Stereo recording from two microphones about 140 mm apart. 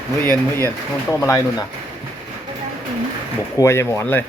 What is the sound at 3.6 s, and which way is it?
Speech, 20° left (ahead or behind).